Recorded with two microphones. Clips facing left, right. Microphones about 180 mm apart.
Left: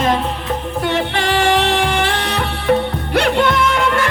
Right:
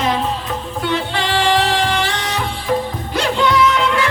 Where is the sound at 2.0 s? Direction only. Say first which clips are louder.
Left 2 dB; 60° left (ahead or behind).